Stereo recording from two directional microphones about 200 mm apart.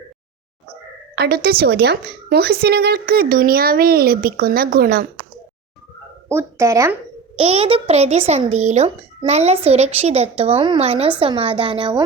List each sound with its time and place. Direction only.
1.1 s a woman's voice: 50° right (ahead or behind)
6.2 s speech: 15° right (ahead or behind)
7.3 s a woman's voice: 30° right (ahead or behind)